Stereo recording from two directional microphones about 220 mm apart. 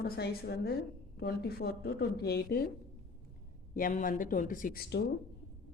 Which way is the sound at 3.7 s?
40° left (ahead or behind).